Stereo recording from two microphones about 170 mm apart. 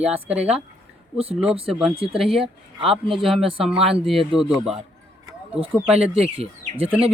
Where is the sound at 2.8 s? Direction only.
30° right (ahead or behind).